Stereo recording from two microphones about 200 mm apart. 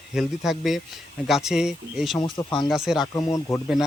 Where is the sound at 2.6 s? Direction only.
Centre (ahead or behind).